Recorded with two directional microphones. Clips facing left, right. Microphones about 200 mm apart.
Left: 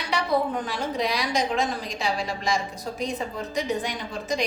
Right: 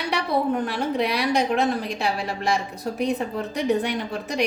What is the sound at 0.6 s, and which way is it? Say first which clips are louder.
A woman's voice: right 4 dB; 60° right (ahead or behind).